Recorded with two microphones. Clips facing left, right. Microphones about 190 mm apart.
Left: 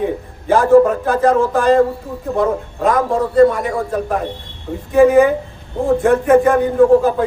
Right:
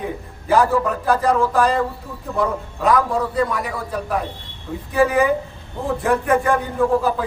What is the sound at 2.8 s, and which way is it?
Speech, 45° left (ahead or behind).